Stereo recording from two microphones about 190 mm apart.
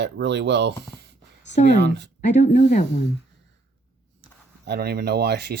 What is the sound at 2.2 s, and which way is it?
Speech, 40° left (ahead or behind).